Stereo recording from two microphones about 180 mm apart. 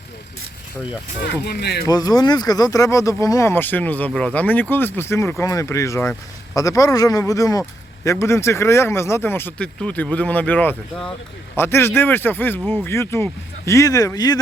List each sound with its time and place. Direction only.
1.2 s speech: 65° left (ahead or behind)
1.9 s a man's voice: 20° left (ahead or behind)